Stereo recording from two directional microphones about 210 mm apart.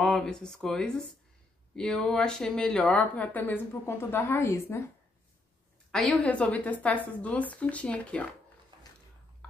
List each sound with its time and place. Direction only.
0.0 s speech: 5° left (ahead or behind)
5.9 s speech: centre (ahead or behind)
8.7 s a sound: 20° right (ahead or behind)